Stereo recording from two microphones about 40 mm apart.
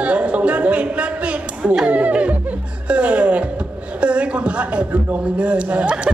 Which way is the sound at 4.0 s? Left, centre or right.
Right.